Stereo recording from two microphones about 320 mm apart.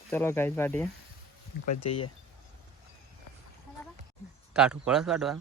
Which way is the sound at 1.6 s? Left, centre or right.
Left.